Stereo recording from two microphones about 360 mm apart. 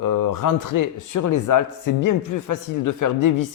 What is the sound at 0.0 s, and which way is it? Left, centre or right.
Speech, left.